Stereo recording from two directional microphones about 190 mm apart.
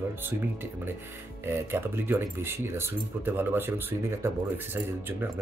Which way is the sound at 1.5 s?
10° right (ahead or behind).